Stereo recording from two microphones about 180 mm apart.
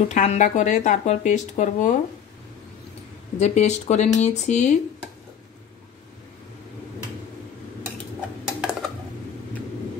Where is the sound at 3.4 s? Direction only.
40° left (ahead or behind).